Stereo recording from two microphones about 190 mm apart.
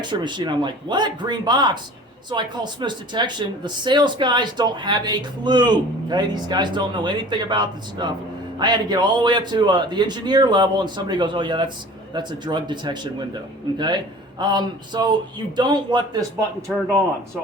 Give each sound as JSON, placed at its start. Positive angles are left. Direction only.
{"t": 0.0, "sound": "speech", "side_deg": -25}
{"t": 16.6, "sound": "speech", "side_deg": 0}